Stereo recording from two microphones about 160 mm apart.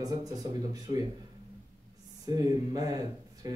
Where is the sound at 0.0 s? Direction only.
25° right (ahead or behind).